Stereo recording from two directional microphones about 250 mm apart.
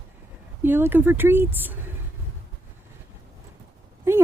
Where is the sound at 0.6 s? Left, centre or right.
Centre.